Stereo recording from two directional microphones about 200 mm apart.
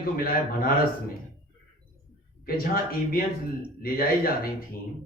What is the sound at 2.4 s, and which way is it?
Speech, 45° left (ahead or behind).